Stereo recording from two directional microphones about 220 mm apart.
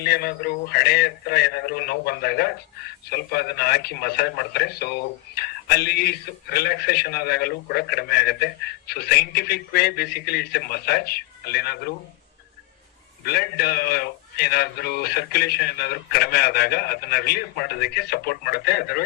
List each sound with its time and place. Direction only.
0.0 s a man's voice: 45° left (ahead or behind)
13.2 s a man's voice: 45° left (ahead or behind)